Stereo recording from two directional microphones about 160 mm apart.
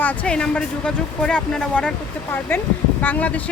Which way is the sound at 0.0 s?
10° left (ahead or behind).